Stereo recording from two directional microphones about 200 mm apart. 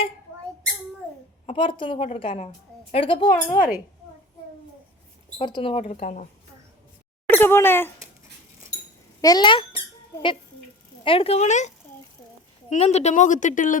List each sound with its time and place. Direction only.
1.5 s a woman's voice: 25° left (ahead or behind)
5.4 s a woman's voice: 25° left (ahead or behind)
5.8 s speech: 40° left (ahead or behind)
7.3 s speech: 10° left (ahead or behind)
9.2 s a woman's voice: 20° left (ahead or behind)
11.0 s speech: 25° left (ahead or behind)
12.7 s speech: 35° left (ahead or behind)